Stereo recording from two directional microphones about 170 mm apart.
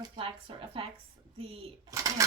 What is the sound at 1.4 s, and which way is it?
Speech, 20° right (ahead or behind).